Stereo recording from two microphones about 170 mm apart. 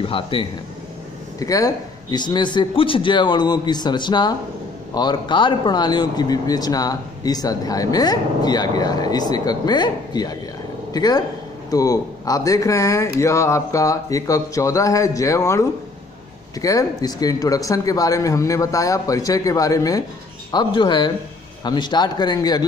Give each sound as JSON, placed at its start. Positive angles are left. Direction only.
{"t": 0.0, "sound": "a man's voice", "side_deg": 30}
{"t": 1.4, "sound": "speech", "side_deg": 20}
{"t": 16.6, "sound": "speech", "side_deg": 20}